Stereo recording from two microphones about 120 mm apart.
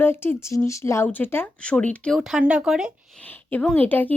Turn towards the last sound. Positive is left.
turn(degrees=15)  # may be behind; listen again after turning